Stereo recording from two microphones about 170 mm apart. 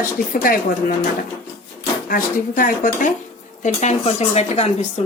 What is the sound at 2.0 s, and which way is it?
A woman's voice, 55° left (ahead or behind).